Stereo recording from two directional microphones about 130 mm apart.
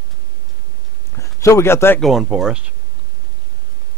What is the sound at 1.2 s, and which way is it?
Speech, 25° left (ahead or behind).